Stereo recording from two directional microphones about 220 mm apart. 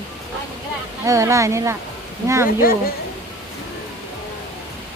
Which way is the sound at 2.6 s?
40° left (ahead or behind).